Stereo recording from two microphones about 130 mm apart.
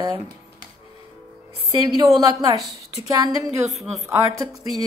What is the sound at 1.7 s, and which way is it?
Speech, 30° right (ahead or behind).